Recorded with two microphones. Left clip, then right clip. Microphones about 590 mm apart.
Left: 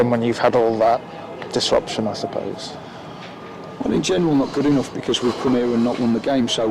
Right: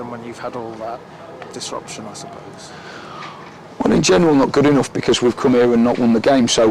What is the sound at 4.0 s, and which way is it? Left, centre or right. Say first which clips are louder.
Speech: right 6 dB; right.